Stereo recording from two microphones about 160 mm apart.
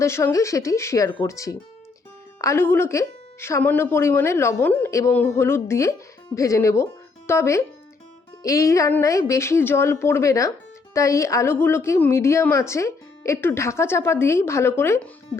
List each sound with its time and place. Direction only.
0.0 s speech: 15° left (ahead or behind)